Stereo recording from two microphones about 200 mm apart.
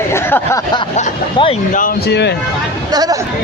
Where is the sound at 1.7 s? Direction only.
45° left (ahead or behind).